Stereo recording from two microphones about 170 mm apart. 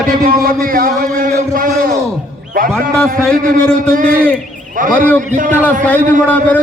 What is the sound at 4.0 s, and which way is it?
A man's voice, 55° right (ahead or behind).